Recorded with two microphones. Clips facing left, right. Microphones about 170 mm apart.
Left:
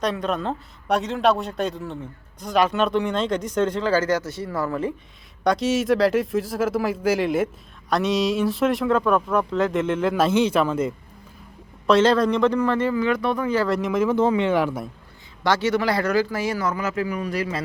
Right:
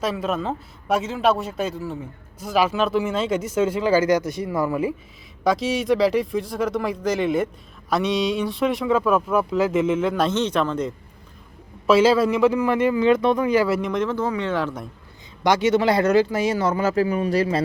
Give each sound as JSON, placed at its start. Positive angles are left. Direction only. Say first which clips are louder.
{"t": 0.0, "sound": "speech", "louder": "even", "side_deg": -5}
{"t": 11.9, "sound": "speech", "louder": "right 1 dB", "side_deg": -5}
{"t": 14.2, "sound": "speech", "louder": "left 5 dB", "side_deg": 20}
{"t": 14.5, "sound": "speech", "louder": "left 3 dB", "side_deg": 10}
{"t": 15.4, "sound": "speech", "louder": "right 3 dB", "side_deg": -15}